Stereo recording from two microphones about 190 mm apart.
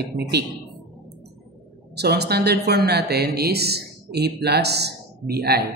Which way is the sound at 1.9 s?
60° right (ahead or behind).